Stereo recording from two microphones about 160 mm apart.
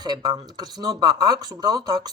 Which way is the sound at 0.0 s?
25° right (ahead or behind).